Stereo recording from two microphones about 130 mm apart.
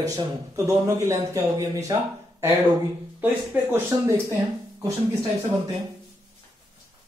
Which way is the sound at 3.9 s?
25° right (ahead or behind).